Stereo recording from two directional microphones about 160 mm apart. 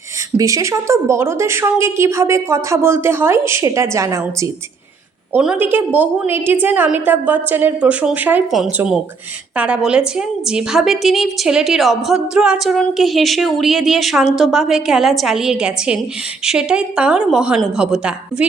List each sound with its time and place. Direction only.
0.3 s a woman's voice: 20° right (ahead or behind)
5.3 s a woman's voice: 10° right (ahead or behind)